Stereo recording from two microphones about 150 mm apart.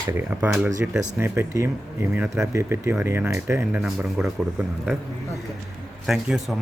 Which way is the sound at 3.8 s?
5° right (ahead or behind).